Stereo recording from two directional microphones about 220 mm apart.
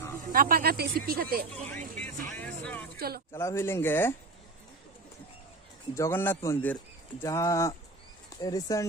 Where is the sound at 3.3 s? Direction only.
10° left (ahead or behind).